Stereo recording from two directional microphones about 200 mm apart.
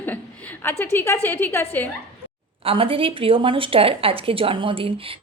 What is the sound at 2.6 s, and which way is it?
A woman's voice, 25° right (ahead or behind).